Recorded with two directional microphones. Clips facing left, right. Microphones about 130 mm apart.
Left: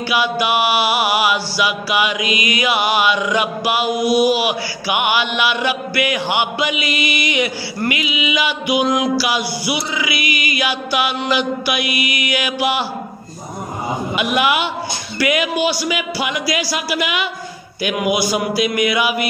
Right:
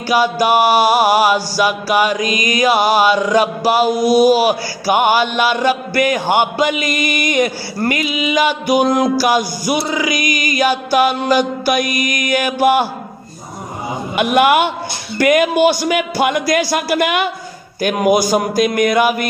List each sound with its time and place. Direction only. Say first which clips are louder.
0.1 s chant: right 5 dB; 40° right (ahead or behind)
14.1 s a man's voice: right 6 dB; 50° right (ahead or behind)